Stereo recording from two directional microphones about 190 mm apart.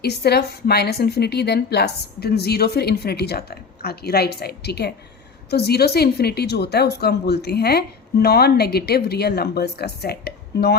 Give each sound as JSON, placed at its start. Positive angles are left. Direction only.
{"t": 0.0, "sound": "a woman's voice", "side_deg": 55}